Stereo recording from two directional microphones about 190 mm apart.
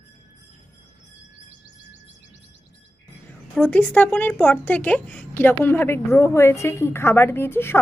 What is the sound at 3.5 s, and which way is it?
Speech, 10° left (ahead or behind).